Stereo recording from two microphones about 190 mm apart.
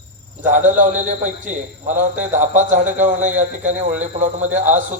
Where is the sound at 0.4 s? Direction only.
40° right (ahead or behind).